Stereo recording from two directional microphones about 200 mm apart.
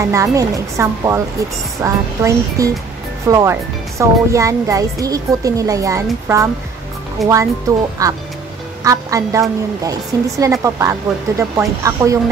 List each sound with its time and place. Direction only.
0.0 s a woman's voice: 15° right (ahead or behind)
7.2 s speech: centre (ahead or behind)
8.0 s a woman's voice: 15° right (ahead or behind)